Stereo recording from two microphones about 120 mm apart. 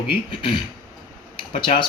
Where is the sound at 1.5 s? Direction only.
45° left (ahead or behind).